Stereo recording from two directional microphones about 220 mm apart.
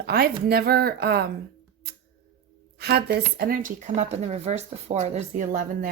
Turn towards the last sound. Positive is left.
turn(degrees=-35)  # may be behind; listen again after turning